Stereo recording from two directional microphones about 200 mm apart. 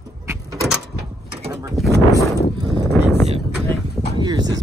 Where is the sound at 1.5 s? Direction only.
15° right (ahead or behind).